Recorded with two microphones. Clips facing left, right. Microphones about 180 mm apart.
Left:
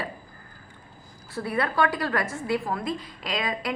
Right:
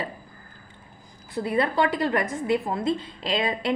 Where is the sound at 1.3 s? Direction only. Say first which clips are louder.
Right 3 dB; 20° right (ahead or behind).